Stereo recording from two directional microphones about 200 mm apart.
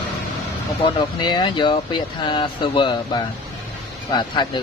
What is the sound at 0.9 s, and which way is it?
Speech, 20° left (ahead or behind).